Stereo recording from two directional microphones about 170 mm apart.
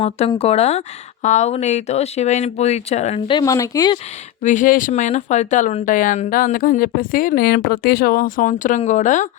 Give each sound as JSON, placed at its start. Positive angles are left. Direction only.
{"t": 0.0, "sound": "speech", "side_deg": 35}
{"t": 3.3, "sound": "speech", "side_deg": 20}
{"t": 4.4, "sound": "speech", "side_deg": 50}